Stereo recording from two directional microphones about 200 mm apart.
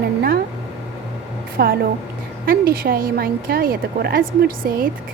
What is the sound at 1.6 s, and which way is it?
A woman's voice, 50° right (ahead or behind).